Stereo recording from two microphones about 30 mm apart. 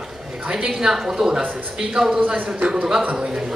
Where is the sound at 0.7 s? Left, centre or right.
Centre.